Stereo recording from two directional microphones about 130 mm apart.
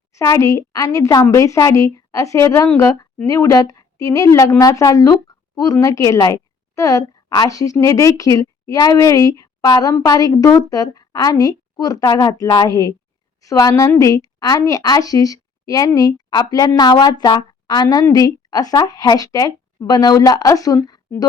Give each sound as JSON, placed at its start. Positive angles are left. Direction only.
{"t": 0.1, "sound": "a woman's voice", "side_deg": 25}